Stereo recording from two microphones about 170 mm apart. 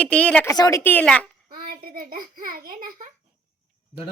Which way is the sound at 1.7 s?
60° right (ahead or behind).